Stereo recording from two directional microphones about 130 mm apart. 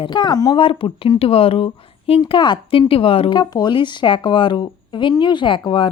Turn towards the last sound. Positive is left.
turn(degrees=40)  # may be behind; listen again after turning